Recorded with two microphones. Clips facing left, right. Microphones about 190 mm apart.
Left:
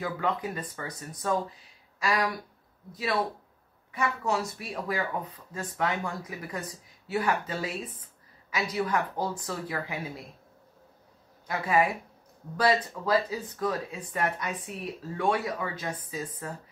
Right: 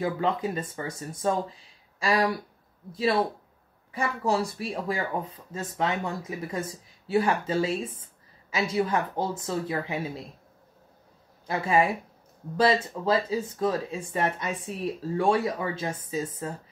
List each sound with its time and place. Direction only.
0.0 s speech: 25° right (ahead or behind)
11.4 s speech: 25° right (ahead or behind)